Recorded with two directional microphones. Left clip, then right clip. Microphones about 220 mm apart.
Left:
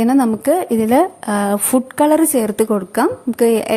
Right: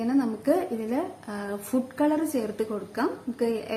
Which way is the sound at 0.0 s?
45° left (ahead or behind).